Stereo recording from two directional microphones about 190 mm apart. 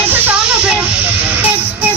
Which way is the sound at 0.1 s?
10° right (ahead or behind).